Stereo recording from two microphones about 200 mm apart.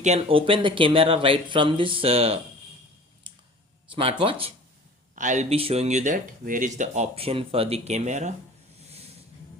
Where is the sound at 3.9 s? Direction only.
25° right (ahead or behind).